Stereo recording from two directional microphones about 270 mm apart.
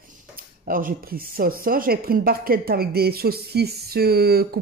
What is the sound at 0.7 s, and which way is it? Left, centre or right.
Speech, right.